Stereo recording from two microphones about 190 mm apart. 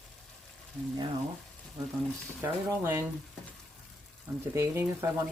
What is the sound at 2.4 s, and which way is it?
Speech, 10° right (ahead or behind).